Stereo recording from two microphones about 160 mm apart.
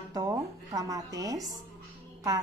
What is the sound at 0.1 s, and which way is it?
Music, 25° right (ahead or behind).